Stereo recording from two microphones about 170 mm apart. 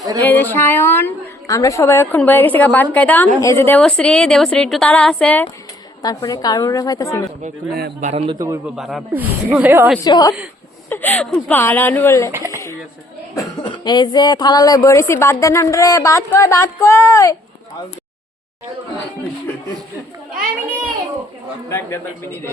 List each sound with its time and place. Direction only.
0.2 s a woman's voice: 10° left (ahead or behind)
6.0 s speech: 20° left (ahead or behind)
8.0 s a man's voice: 40° right (ahead or behind)
8.6 s speech: centre (ahead or behind)
10.0 s speech: 25° left (ahead or behind)
10.8 s a woman's voice: 10° left (ahead or behind)
12.3 s speech: 20° right (ahead or behind)
13.3 s speech: 20° left (ahead or behind)
21.7 s a woman's voice: 15° left (ahead or behind)